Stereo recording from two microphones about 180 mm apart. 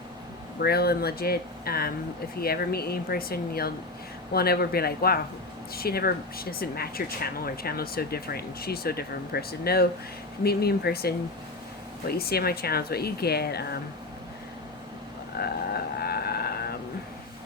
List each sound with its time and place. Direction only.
0.6 s speech: 60° left (ahead or behind)
15.4 s frog: 60° left (ahead or behind)